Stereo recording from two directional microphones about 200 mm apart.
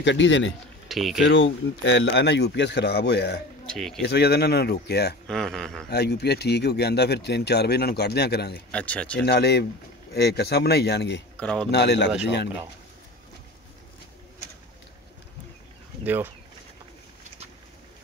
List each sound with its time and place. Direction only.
0.0 s speech: 65° left (ahead or behind)
0.8 s speech: centre (ahead or behind)
1.2 s speech: 65° left (ahead or behind)
3.6 s speech: 5° left (ahead or behind)
4.0 s speech: 55° left (ahead or behind)
5.3 s speech: 5° left (ahead or behind)
5.9 s speech: 55° left (ahead or behind)
8.7 s speech: 5° left (ahead or behind)
9.2 s speech: 55° left (ahead or behind)
11.3 s speech: 5° left (ahead or behind)
11.7 s speech: 60° left (ahead or behind)
16.0 s speech: 10° right (ahead or behind)